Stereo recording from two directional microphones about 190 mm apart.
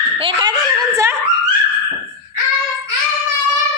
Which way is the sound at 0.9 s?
15° right (ahead or behind).